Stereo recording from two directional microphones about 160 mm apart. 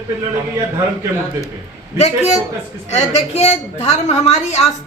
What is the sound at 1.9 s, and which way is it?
A woman's voice, 45° left (ahead or behind).